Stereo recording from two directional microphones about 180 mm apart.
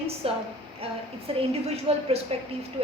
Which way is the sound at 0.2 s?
30° right (ahead or behind).